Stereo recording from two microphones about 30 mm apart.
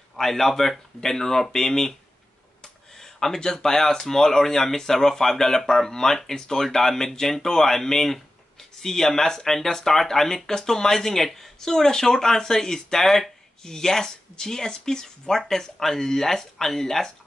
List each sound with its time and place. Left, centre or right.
0.1 s speech: centre
2.6 s a sound: centre
3.3 s speech: left